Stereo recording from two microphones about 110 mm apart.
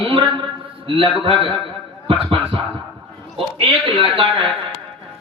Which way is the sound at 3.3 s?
55° right (ahead or behind).